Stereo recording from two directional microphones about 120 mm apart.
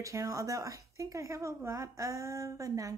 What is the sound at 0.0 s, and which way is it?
Speech, 25° right (ahead or behind).